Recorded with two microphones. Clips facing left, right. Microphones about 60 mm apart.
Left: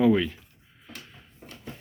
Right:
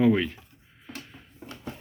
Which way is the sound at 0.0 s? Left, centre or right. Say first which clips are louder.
Left 1 dB; right.